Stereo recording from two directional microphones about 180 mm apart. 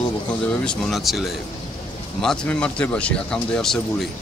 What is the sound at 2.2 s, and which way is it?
Speech, 5° left (ahead or behind).